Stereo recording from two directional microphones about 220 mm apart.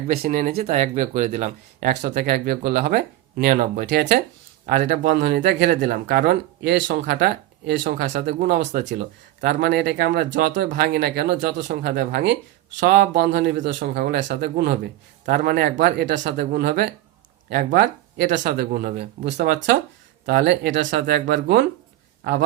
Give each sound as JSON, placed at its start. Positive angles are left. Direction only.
{"t": 0.1, "sound": "a man's voice", "side_deg": -40}